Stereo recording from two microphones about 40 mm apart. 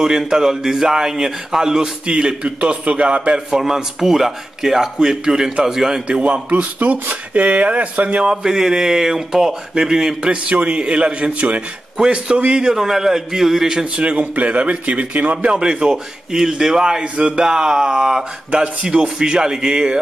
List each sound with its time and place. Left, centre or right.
0.0 s a man's voice: centre
6.0 s a man's voice: right
6.5 s speech: right
8.4 s a man's voice: centre
10.3 s a man's voice: right
11.3 s a man's voice: right
12.7 s a man's voice: centre
13.8 s a man's voice: right
15.3 s a man's voice: right
17.0 s a man's voice: right